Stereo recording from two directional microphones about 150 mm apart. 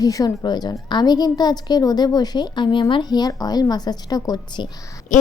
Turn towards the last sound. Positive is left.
turn(degrees=60)  # may be behind; listen again after turning